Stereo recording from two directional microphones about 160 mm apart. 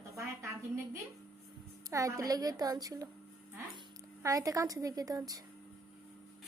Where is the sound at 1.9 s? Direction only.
20° right (ahead or behind).